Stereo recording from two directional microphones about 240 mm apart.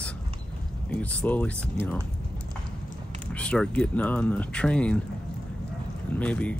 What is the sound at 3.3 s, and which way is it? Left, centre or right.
Speech, centre.